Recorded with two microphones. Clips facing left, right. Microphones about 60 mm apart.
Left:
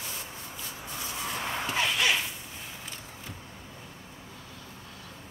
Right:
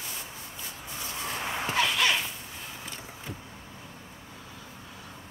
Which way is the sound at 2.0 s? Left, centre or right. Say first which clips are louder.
Right 1 dB; centre.